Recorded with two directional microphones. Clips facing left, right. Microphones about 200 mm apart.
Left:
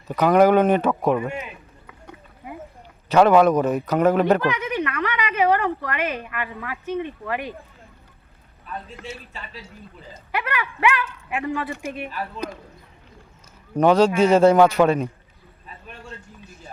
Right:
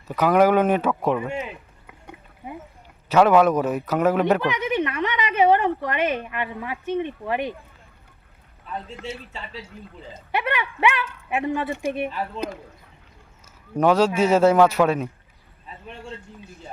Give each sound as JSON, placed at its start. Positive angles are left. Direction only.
{"t": 0.2, "sound": "a man's voice", "side_deg": -5}
{"t": 1.0, "sound": "speech", "side_deg": 10}
{"t": 1.3, "sound": "a woman's voice", "side_deg": -25}
{"t": 3.1, "sound": "a man's voice", "side_deg": -5}
{"t": 4.4, "sound": "speech", "side_deg": -25}
{"t": 8.6, "sound": "a woman's voice", "side_deg": -25}
{"t": 13.7, "sound": "a man's voice", "side_deg": -5}